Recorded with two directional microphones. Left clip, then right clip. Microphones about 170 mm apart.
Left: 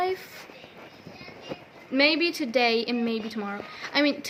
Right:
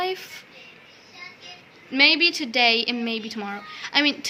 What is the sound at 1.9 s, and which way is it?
A woman's voice, 10° left (ahead or behind).